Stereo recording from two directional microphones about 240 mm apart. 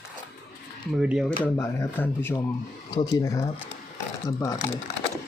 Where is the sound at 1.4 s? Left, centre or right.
Centre.